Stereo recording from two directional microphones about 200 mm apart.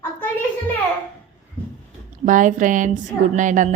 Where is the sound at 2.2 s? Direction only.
40° right (ahead or behind).